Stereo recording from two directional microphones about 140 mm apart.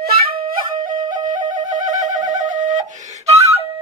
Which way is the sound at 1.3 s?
30° right (ahead or behind).